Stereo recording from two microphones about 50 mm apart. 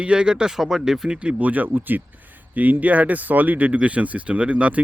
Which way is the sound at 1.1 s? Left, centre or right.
Right.